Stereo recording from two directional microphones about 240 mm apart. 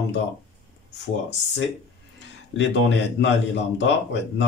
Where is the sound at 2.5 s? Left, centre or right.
Left.